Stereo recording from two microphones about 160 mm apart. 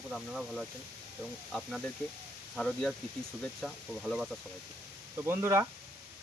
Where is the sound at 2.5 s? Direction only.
Centre (ahead or behind).